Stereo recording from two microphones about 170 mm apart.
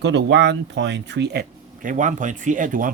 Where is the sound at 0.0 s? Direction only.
90° right; by 1.5 s 75° right (ahead or behind).